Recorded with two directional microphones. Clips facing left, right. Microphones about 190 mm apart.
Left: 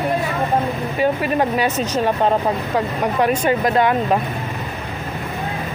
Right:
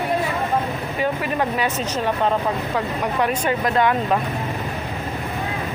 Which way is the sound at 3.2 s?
35° left (ahead or behind).